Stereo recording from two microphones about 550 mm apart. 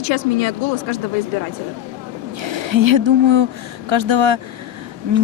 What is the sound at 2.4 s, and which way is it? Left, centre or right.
Speech, right.